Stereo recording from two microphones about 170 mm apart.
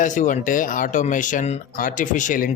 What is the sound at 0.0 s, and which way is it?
Speech, 50° left (ahead or behind).